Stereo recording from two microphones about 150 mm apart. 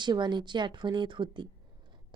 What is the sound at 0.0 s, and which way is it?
A woman's voice, 30° right (ahead or behind).